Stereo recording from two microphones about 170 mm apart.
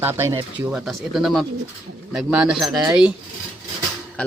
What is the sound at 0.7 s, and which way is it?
Speech, centre (ahead or behind).